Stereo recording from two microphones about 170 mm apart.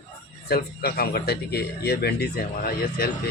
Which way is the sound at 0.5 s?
65° left (ahead or behind).